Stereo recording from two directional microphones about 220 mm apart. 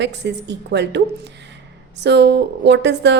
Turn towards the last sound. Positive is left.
turn(degrees=-50)  # may be behind; listen again after turning